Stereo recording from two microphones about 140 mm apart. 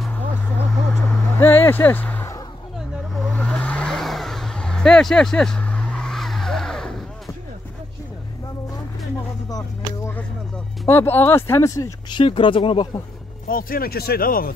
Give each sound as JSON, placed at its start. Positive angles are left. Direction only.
{"t": 1.4, "sound": "speech", "side_deg": 15}
{"t": 3.3, "sound": "vehicle", "side_deg": 10}
{"t": 9.5, "sound": "a sound", "side_deg": 25}
{"t": 10.9, "sound": "speech", "side_deg": 15}
{"t": 13.5, "sound": "speech", "side_deg": 90}